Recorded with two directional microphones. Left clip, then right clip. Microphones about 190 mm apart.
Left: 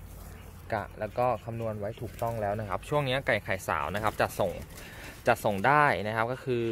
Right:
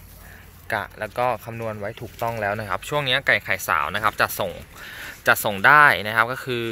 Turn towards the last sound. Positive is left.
turn(degrees=0)  # may be behind; listen again after turning